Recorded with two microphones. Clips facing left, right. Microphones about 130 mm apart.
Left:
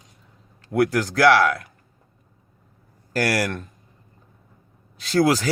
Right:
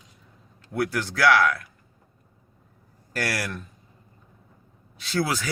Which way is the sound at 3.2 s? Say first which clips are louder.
Left 7 dB; 40° left (ahead or behind).